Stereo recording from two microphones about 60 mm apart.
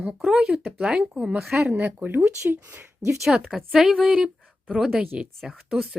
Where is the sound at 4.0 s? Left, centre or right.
Centre.